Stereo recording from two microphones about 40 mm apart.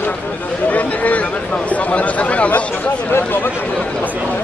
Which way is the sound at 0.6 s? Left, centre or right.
Left.